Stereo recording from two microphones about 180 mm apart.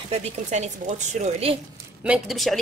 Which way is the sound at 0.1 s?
40° right (ahead or behind).